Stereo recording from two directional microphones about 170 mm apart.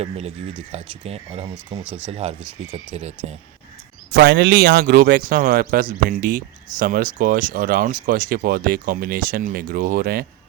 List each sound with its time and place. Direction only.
0.7 s speech: 40° right (ahead or behind)
1.8 s speech: 10° right (ahead or behind)
2.0 s speech: 40° right (ahead or behind)
4.1 s speech: 65° right (ahead or behind)